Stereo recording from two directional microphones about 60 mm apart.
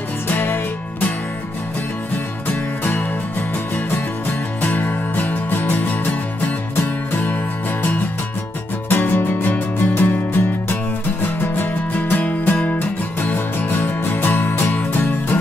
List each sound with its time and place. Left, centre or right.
0.3 s music: left
2.8 s music: left
4.6 s music: left
8.8 s music: left